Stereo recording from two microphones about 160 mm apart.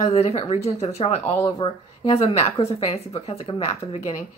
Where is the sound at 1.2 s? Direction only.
15° left (ahead or behind).